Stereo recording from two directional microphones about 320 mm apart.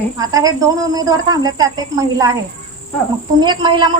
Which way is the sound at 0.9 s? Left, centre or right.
Centre.